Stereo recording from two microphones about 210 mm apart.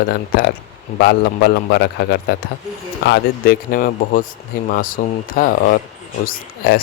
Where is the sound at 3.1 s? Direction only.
45° left (ahead or behind).